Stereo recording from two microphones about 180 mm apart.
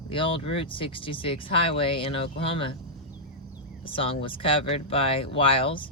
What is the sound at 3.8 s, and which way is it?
Speech, 30° left (ahead or behind).